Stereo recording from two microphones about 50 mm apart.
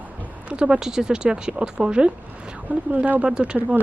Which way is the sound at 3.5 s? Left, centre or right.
Right.